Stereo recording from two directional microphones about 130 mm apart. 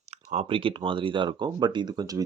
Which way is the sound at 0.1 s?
60° right (ahead or behind).